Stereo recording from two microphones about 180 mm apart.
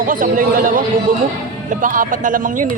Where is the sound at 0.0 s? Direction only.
50° right (ahead or behind).